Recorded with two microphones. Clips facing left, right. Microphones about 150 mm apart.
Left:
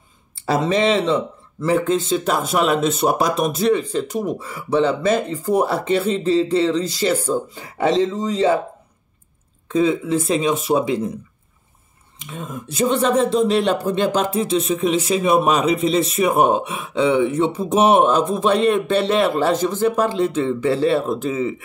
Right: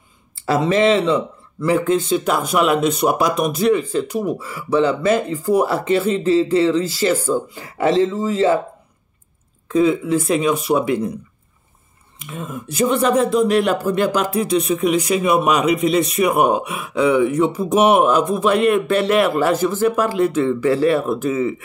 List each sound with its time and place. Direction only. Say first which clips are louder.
0.7 s speech: right 3 dB; 20° left (ahead or behind)
9.7 s speech: right 2 dB; 25° left (ahead or behind)
12.4 s speech: right 2 dB; 25° left (ahead or behind)